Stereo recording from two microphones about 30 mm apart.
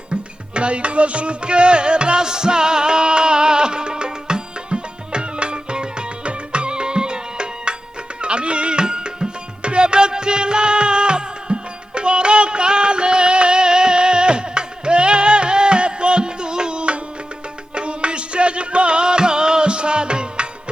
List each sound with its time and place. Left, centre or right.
0.1 s music: right